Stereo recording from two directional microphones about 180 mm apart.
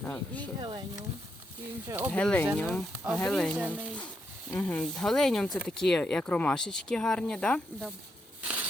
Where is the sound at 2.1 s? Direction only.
5° left (ahead or behind).